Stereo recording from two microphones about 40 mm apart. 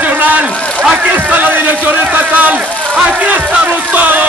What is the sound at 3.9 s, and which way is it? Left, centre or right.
Speech, right.